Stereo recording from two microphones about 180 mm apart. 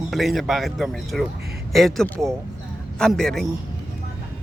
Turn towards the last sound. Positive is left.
turn(degrees=0)  # may be behind; listen again after turning